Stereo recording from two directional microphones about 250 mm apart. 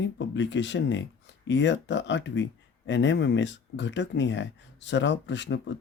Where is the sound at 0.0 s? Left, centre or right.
Left.